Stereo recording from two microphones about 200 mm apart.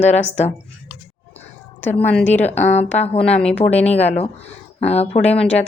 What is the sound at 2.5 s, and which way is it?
Speech, 35° left (ahead or behind).